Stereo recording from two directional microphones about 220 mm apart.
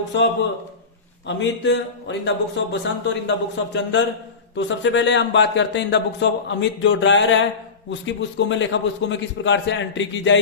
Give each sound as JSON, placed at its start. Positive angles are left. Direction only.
{"t": 1.4, "sound": "speech", "side_deg": 55}